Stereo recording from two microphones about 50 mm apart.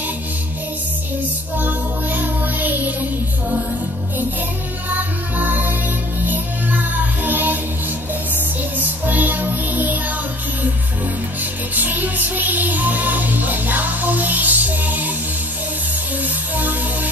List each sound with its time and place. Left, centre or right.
1.6 s music: right
4.8 s music: right
8.7 s music: right
11.7 s speech: right
16.5 s music: right